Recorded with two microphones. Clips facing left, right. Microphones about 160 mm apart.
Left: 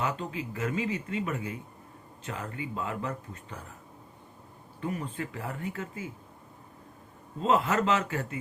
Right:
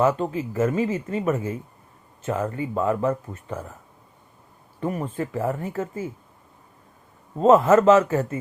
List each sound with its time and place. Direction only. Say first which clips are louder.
0.0 s speech: right 11 dB; 45° right (ahead or behind)
4.8 s speech: right 7 dB; 45° right (ahead or behind)
7.3 s speech: right 11 dB; 45° right (ahead or behind)